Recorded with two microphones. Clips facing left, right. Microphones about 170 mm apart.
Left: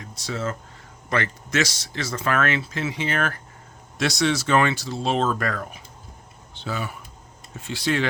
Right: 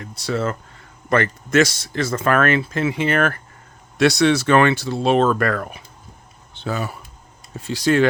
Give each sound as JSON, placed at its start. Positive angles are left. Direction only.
{"t": 0.0, "sound": "speech", "side_deg": -60}
{"t": 6.5, "sound": "a sound", "side_deg": -55}
{"t": 7.5, "sound": "speech", "side_deg": -40}